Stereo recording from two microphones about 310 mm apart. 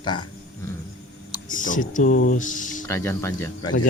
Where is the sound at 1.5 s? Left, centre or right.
Left.